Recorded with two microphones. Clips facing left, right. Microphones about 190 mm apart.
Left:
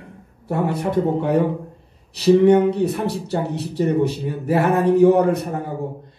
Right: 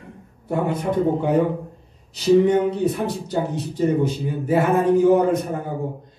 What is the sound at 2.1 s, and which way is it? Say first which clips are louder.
Speech: left 3 dB; 65° left (ahead or behind).